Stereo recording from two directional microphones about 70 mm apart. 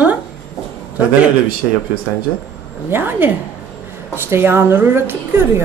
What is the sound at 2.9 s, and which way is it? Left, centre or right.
A woman's voice, right.